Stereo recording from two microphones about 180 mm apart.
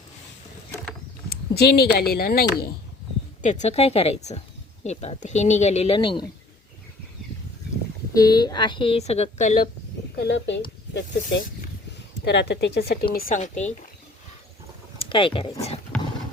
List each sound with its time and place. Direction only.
1.3 s speech: 60° left (ahead or behind)
3.4 s speech: 40° left (ahead or behind)
8.1 s a woman's voice: 20° left (ahead or behind); by 9.6 s 40° left (ahead or behind)
10.2 s speech: 80° left
12.2 s speech: 70° left (ahead or behind)
13.1 s a woman's voice: 45° left (ahead or behind)
14.9 s speech: 30° left (ahead or behind)